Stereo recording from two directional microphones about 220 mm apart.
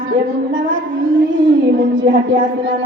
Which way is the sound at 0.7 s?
60° right (ahead or behind).